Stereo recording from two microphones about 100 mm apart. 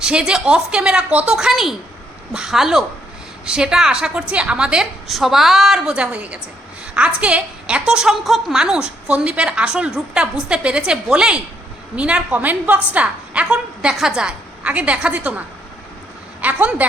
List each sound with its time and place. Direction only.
0.0 s a woman's voice: 10° right (ahead or behind)